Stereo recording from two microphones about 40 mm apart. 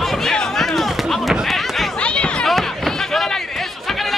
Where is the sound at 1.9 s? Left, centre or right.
Left.